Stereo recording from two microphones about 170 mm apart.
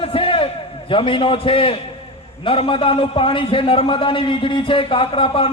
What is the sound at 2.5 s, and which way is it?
A man's voice, 30° left (ahead or behind).